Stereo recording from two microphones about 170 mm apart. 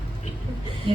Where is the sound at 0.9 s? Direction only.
30° right (ahead or behind).